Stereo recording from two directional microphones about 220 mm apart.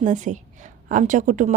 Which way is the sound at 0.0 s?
35° right (ahead or behind).